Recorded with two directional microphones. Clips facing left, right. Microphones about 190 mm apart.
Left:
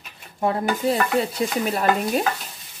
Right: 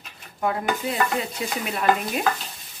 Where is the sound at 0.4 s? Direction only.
30° left (ahead or behind).